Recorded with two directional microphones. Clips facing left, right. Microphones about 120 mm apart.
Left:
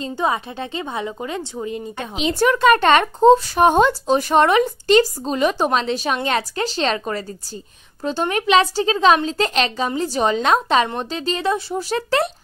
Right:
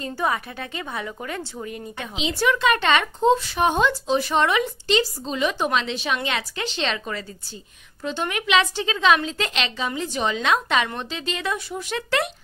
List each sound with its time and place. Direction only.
0.0 s a woman's voice: 20° left (ahead or behind)
2.1 s a woman's voice: 50° left (ahead or behind)